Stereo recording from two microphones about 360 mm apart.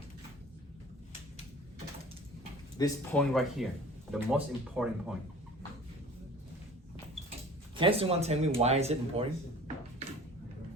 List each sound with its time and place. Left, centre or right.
2.7 s speech: centre
7.8 s speech: centre